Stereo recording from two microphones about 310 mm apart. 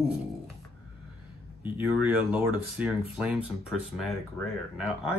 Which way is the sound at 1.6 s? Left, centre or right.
Centre.